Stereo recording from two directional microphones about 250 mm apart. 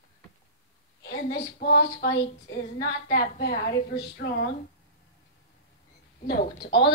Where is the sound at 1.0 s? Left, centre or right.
Left.